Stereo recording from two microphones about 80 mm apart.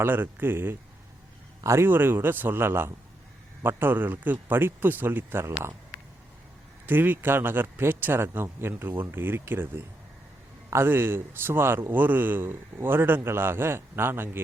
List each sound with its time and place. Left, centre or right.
0.0 s a man's voice: right
6.8 s a man's voice: right